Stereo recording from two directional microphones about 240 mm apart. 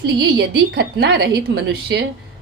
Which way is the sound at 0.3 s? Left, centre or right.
Right.